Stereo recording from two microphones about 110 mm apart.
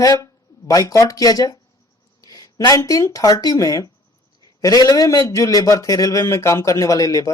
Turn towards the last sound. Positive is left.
turn(degrees=30)  # may be behind; listen again after turning